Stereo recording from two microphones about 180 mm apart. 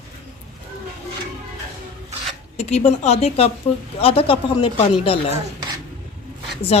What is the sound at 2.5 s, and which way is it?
A woman's voice, 40° left (ahead or behind).